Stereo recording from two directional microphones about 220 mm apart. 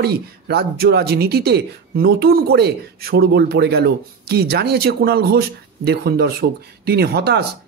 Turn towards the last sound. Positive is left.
turn(degrees=-45)  # may be behind; listen again after turning